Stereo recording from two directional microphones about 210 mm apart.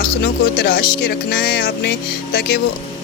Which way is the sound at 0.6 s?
45° left (ahead or behind).